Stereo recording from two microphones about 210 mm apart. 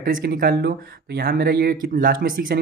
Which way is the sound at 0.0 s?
45° right (ahead or behind).